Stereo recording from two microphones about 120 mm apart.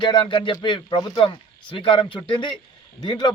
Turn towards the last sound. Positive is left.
turn(degrees=35)  # may be behind; listen again after turning